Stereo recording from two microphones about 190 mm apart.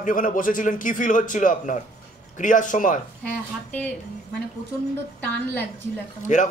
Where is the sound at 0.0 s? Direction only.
45° left (ahead or behind).